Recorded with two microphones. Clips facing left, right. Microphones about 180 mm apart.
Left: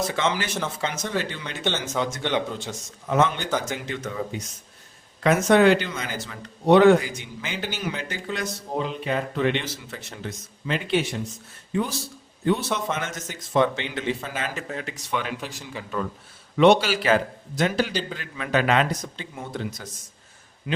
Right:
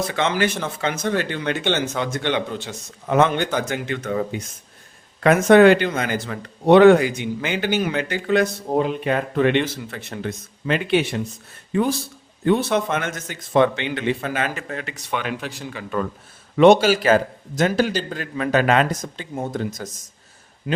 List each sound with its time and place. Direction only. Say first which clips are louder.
0.1 s a man's voice: right 4 dB; 60° right (ahead or behind)
16.6 s a man's voice: right 4 dB; 45° right (ahead or behind)